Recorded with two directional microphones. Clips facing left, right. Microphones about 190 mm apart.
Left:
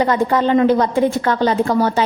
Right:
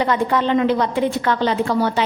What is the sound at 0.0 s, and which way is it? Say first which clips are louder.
A woman's voice: left 3 dB; 40° left (ahead or behind).